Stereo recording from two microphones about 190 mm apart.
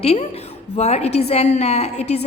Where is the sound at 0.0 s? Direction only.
30° left (ahead or behind).